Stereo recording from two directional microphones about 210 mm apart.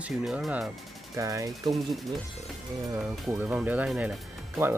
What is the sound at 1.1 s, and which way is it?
Speech, 15° right (ahead or behind).